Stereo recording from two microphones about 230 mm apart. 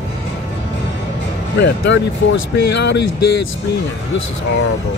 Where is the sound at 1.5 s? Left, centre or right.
Left.